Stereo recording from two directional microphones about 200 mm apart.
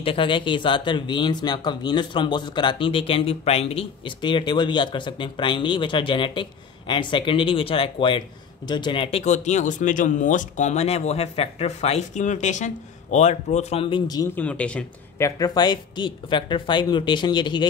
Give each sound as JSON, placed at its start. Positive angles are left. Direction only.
{"t": 0.0, "sound": "speech", "side_deg": 25}